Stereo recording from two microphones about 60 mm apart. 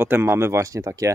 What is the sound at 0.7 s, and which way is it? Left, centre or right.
Speech, right.